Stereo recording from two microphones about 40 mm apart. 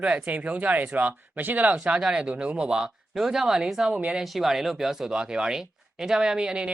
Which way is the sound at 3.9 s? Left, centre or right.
Right.